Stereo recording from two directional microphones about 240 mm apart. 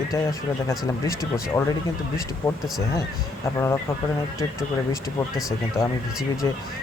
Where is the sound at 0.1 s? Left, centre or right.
Centre.